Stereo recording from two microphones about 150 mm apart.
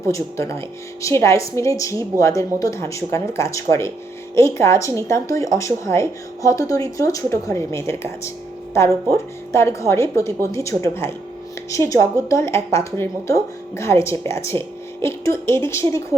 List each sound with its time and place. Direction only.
1.0 s speech: 20° left (ahead or behind)
14.5 s speech: 30° right (ahead or behind)
15.0 s a woman's voice: 20° left (ahead or behind)